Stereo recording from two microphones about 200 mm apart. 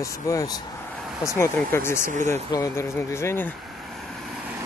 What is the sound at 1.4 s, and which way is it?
Speech, 10° left (ahead or behind).